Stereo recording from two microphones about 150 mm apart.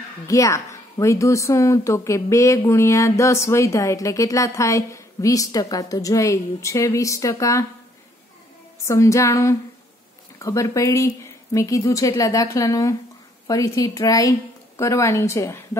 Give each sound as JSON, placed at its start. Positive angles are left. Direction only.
{"t": 0.3, "sound": "a woman's voice", "side_deg": 20}
{"t": 8.8, "sound": "a woman's voice", "side_deg": 20}